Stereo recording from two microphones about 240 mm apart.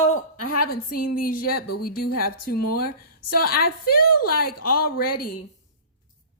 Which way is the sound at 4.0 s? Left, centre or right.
Left.